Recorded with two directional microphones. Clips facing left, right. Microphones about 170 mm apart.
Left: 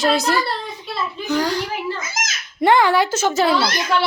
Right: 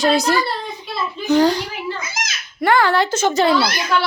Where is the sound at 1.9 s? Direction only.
45° left (ahead or behind).